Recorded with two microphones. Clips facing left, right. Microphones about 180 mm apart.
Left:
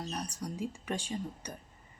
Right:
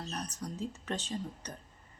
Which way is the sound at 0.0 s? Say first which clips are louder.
Left 1 dB; 10° left (ahead or behind).